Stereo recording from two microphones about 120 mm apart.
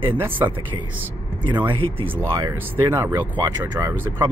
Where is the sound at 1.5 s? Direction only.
45° right (ahead or behind).